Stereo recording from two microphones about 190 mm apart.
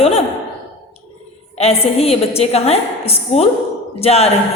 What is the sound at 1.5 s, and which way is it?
A woman's voice, 30° left (ahead or behind).